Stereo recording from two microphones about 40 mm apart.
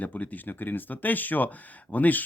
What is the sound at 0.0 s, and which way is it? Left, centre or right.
Speech, left.